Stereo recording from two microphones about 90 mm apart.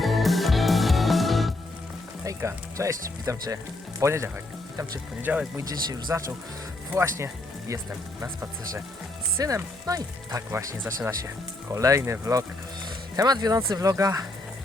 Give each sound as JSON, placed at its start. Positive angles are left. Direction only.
{"t": 0.0, "sound": "music", "side_deg": 0}
{"t": 2.2, "sound": "speech", "side_deg": -35}
{"t": 5.2, "sound": "speech", "side_deg": -15}
{"t": 5.5, "sound": "speech", "side_deg": -45}
{"t": 6.9, "sound": "speech", "side_deg": -30}
{"t": 9.4, "sound": "speech", "side_deg": -40}
{"t": 13.1, "sound": "speech", "side_deg": -45}